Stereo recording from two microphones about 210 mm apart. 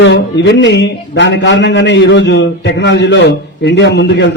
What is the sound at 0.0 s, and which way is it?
A man's voice, 55° left (ahead or behind).